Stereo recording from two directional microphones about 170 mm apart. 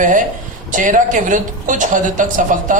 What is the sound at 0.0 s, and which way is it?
A man's voice, 50° right (ahead or behind).